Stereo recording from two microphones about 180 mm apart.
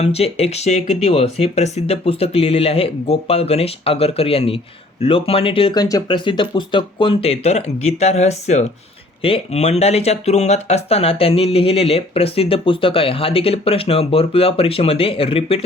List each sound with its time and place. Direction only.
0.0 s speech: 35° left (ahead or behind)